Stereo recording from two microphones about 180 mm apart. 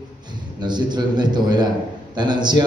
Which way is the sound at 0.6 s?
25° right (ahead or behind).